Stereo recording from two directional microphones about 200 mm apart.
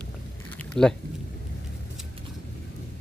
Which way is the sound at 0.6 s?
5° left (ahead or behind).